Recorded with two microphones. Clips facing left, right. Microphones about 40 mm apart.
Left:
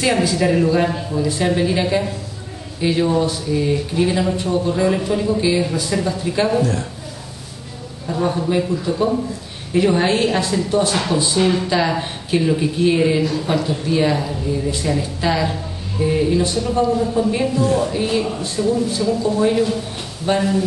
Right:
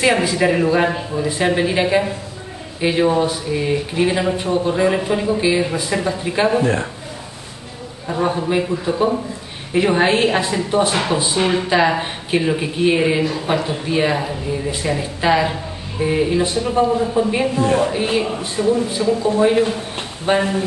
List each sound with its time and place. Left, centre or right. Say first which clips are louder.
0.0 s a woman's voice: right 1 dB; right
8.1 s a woman's voice: even; centre
17.6 s speech: right 3 dB; right
17.9 s a woman's voice: right 1 dB; right